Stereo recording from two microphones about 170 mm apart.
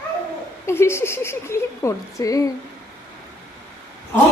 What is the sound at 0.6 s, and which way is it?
A woman's voice, 15° left (ahead or behind).